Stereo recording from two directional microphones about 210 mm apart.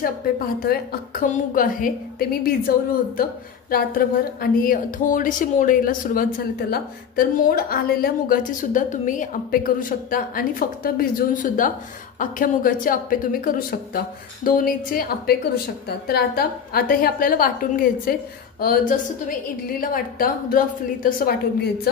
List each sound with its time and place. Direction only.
1.2 s a woman's voice: 40° left (ahead or behind)
3.7 s a woman's voice: 45° left (ahead or behind)